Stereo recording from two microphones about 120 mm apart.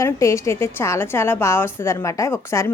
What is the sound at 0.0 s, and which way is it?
A woman's voice, 25° left (ahead or behind).